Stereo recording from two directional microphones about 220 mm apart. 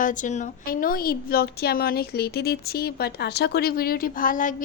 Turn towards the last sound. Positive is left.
turn(degrees=40)  # may be behind; listen again after turning